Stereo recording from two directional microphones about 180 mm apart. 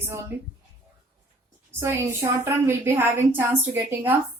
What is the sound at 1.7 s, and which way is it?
A woman's voice, 15° right (ahead or behind).